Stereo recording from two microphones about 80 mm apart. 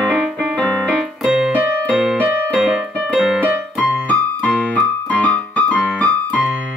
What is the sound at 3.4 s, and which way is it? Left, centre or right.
Keyboard, right.